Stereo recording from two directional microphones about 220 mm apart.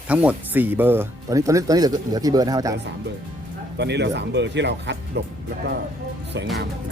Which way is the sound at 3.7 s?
50° right (ahead or behind).